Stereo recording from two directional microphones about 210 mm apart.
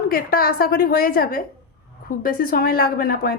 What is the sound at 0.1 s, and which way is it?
A woman's voice, 45° left (ahead or behind).